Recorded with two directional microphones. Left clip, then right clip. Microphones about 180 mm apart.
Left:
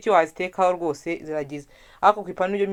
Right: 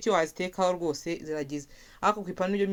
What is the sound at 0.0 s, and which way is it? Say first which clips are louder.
Speech: left 7 dB; 25° right (ahead or behind).